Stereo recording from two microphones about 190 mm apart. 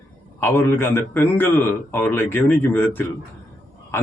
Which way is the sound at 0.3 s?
10° left (ahead or behind).